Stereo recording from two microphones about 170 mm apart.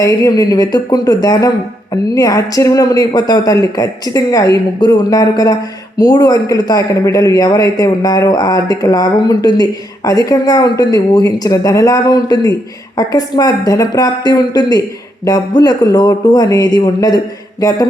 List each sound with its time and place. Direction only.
0.0 s speech: 20° left (ahead or behind)